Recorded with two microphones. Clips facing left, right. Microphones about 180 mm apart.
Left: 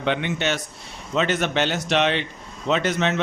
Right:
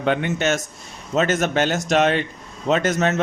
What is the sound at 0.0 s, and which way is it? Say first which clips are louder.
A man's voice: right 3 dB; 45° right (ahead or behind).